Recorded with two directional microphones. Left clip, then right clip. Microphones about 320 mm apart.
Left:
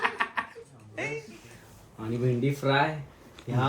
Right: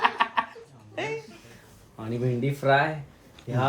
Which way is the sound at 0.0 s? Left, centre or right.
Right.